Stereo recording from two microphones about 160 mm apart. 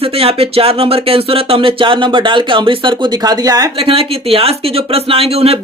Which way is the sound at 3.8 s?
35° right (ahead or behind).